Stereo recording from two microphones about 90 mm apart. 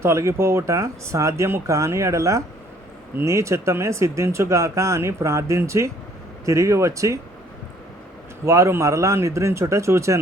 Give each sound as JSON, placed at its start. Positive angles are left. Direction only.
{"t": 0.0, "sound": "speech", "side_deg": -35}
{"t": 8.4, "sound": "speech", "side_deg": -35}